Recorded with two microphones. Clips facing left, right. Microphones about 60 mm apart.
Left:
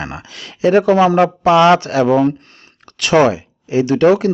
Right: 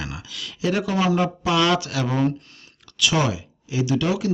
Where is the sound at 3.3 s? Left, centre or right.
Left.